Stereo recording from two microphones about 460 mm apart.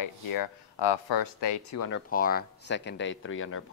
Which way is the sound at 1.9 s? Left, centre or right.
Centre.